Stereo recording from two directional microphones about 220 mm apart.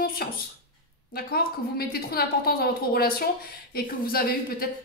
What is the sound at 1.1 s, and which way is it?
A woman's voice, 45° left (ahead or behind).